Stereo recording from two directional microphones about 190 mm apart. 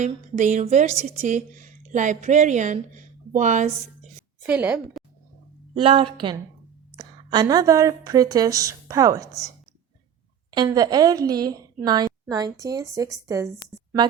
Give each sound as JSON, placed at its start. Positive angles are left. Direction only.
{"t": 0.0, "sound": "a woman's voice", "side_deg": -40}
{"t": 4.4, "sound": "a woman's voice", "side_deg": -5}
{"t": 5.7, "sound": "a woman's voice", "side_deg": -30}
{"t": 10.5, "sound": "a woman's voice", "side_deg": -20}